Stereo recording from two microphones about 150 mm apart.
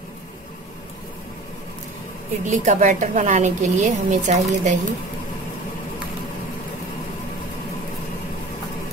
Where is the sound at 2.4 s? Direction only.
55° right (ahead or behind).